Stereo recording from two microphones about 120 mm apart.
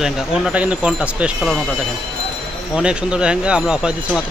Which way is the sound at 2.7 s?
5° right (ahead or behind).